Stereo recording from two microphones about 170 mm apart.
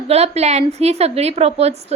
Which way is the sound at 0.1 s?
40° right (ahead or behind).